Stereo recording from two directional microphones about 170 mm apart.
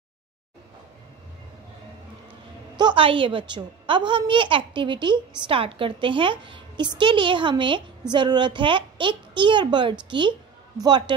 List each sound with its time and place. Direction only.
2.8 s a woman's voice: 30° right (ahead or behind)